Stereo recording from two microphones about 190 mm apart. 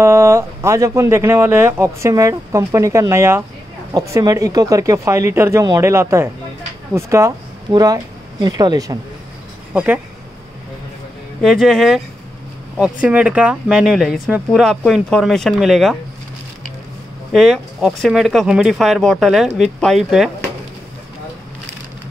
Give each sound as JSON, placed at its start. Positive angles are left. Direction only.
{"t": 0.0, "sound": "speech", "side_deg": -15}
{"t": 11.4, "sound": "speech", "side_deg": 0}
{"t": 17.3, "sound": "speech", "side_deg": 0}